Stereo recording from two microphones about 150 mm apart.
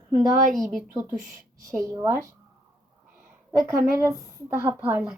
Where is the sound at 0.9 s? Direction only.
20° right (ahead or behind).